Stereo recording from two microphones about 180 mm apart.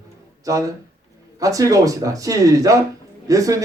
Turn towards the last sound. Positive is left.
turn(degrees=-20)  # may be behind; listen again after turning